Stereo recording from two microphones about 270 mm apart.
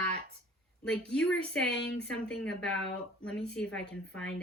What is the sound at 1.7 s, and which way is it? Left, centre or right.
Speech, left.